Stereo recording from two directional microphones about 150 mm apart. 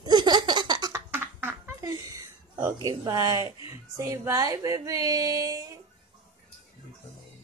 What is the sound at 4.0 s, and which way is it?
Speech, 20° right (ahead or behind).